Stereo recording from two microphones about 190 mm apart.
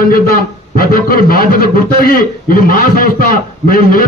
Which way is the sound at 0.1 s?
50° left (ahead or behind).